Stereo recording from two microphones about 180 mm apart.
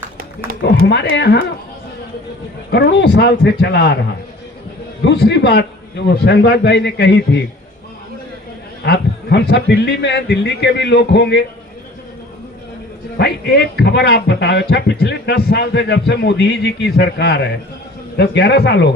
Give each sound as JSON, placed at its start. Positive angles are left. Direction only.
{"t": 0.6, "sound": "speech", "side_deg": 75}
{"t": 2.7, "sound": "speech", "side_deg": 70}
{"t": 5.0, "sound": "speech", "side_deg": 70}
{"t": 8.8, "sound": "speech", "side_deg": 65}
{"t": 13.1, "sound": "speech", "side_deg": 70}